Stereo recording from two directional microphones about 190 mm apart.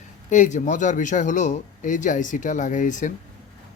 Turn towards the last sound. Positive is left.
turn(degrees=40)  # may be behind; listen again after turning